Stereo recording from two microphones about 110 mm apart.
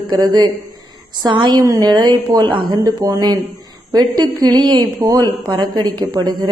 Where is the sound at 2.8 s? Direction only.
30° right (ahead or behind).